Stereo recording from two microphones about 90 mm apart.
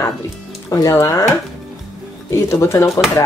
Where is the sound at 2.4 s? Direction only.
30° left (ahead or behind).